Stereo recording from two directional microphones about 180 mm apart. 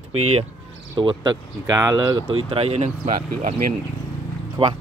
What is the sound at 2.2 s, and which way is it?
Speech, 30° right (ahead or behind).